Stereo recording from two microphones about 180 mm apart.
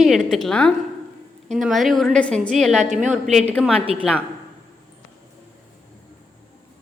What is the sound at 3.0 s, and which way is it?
Speech, 40° right (ahead or behind).